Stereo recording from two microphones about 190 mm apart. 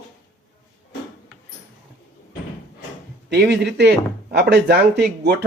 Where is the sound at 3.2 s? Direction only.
65° right (ahead or behind).